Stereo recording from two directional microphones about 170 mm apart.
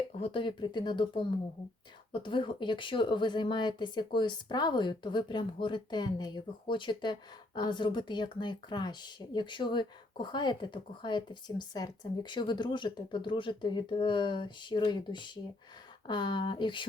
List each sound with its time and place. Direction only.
0.1 s speech: 35° left (ahead or behind)